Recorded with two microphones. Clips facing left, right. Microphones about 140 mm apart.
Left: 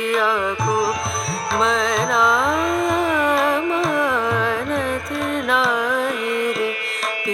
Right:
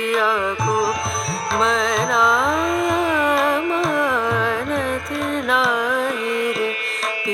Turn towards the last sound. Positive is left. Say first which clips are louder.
# even
turn(degrees=0)  # may be behind; listen again after turning